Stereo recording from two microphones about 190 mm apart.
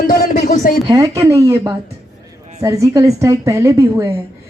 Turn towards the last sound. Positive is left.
turn(degrees=-15)  # may be behind; listen again after turning